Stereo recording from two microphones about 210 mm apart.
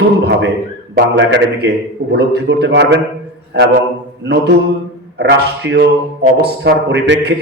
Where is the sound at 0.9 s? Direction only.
50° right (ahead or behind).